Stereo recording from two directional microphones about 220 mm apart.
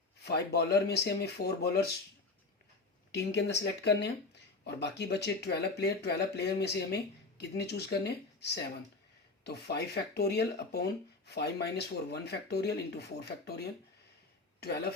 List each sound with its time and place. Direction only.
0.2 s speech: 50° left (ahead or behind)
3.1 s speech: 50° left (ahead or behind)